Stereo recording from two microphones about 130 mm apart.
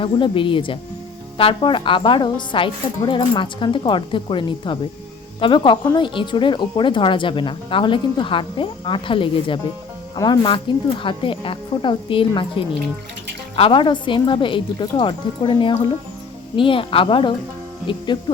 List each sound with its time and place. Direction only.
0.0 s speech: 40° left (ahead or behind)